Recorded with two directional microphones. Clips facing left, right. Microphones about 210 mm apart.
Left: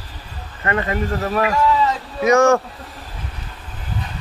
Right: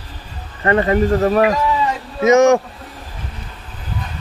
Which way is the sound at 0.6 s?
30° right (ahead or behind).